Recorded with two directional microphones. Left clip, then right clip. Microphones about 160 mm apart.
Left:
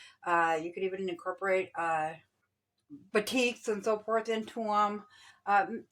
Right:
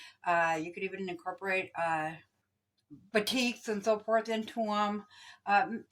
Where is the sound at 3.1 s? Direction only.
45° left (ahead or behind).